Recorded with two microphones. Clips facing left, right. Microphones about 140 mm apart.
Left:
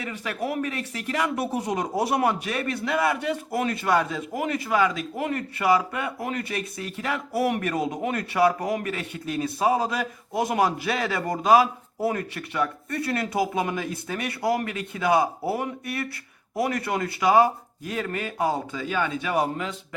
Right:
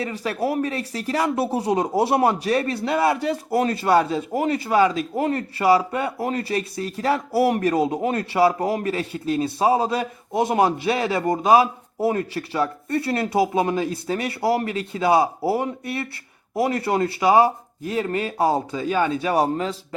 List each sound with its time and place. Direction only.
0.0 s speech: 35° right (ahead or behind)